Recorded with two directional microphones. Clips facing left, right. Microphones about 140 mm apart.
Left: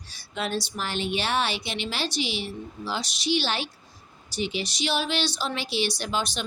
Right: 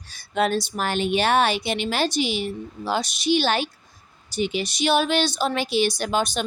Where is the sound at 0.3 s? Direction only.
50° right (ahead or behind).